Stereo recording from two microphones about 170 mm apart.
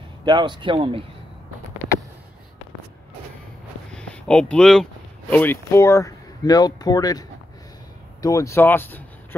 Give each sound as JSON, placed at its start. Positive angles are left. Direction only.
{"t": 0.2, "sound": "speech", "side_deg": -25}
{"t": 3.9, "sound": "a sound", "side_deg": 5}
{"t": 5.3, "sound": "speech", "side_deg": 10}